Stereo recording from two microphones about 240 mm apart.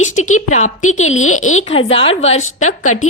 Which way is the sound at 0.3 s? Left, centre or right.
Left.